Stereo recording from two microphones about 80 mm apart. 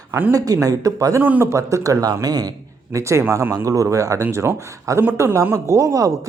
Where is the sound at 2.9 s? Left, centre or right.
Right.